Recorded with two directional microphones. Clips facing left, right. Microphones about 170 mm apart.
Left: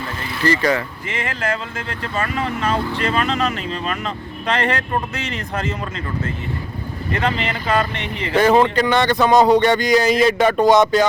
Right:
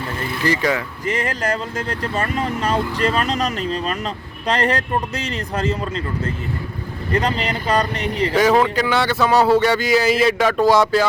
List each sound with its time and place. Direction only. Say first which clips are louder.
0.4 s speech: left 2 dB; 10° right (ahead or behind)
1.0 s speech: right 3 dB; 40° right (ahead or behind)
7.1 s speech: right 1 dB; 35° right (ahead or behind)
8.3 s speech: left 2 dB; 10° right (ahead or behind)
9.2 s speech: left 2 dB; 15° left (ahead or behind)
9.6 s speech: left 1 dB; 5° right (ahead or behind)
10.6 s music: left 2 dB; 20° left (ahead or behind)